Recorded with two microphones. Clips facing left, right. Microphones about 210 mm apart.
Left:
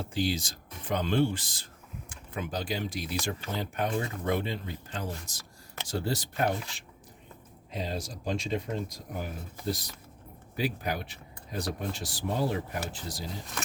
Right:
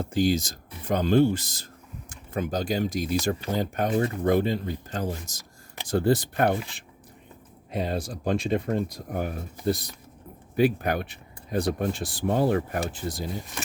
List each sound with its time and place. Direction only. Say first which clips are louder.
0.0 s speech: right 7 dB; 45° right (ahead or behind)
5.8 s speech: right 9 dB; 55° right (ahead or behind)